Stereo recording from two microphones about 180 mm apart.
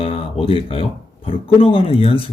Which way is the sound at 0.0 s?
30° left (ahead or behind).